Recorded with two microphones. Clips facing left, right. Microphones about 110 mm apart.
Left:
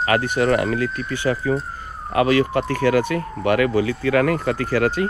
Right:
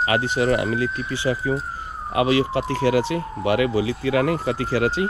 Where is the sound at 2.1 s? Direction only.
45° left (ahead or behind).